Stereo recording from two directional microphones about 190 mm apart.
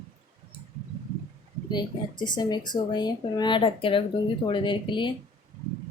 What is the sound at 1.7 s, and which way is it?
Speech, 25° left (ahead or behind).